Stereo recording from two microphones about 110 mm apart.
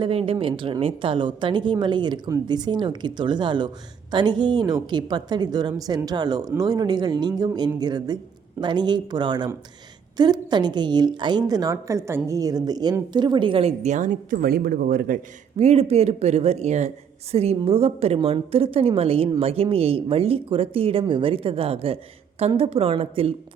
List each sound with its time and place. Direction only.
0.0 s a woman's voice: 60° right (ahead or behind); by 14.0 s 75° right (ahead or behind)
15.5 s speech: 70° right (ahead or behind); by 16.9 s 90° right
17.3 s a woman's voice: 70° right (ahead or behind)